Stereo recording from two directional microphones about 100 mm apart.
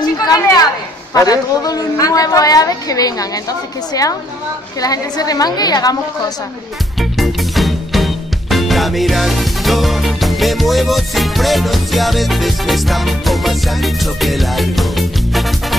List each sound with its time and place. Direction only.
0.0 s a sound: 40° left (ahead or behind)
1.1 s a woman's voice: 40° left (ahead or behind)
7.0 s music: centre (ahead or behind)